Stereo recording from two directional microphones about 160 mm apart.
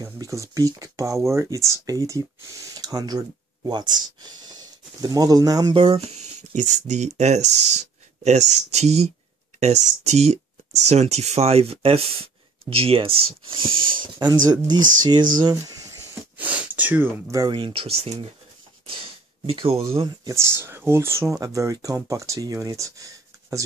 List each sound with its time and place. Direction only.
0.0 s speech: 20° right (ahead or behind)
5.8 s speech: 35° right (ahead or behind)
14.8 s speech: 55° right (ahead or behind)
15.4 s speech: 20° right (ahead or behind)
16.3 s speech: 10° right (ahead or behind); by 18.3 s 40° right (ahead or behind)
19.4 s speech: 35° right (ahead or behind)
20.3 s speech: 15° right (ahead or behind)